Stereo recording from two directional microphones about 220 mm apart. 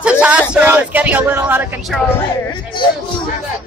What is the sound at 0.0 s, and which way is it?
Speech, 5° right (ahead or behind).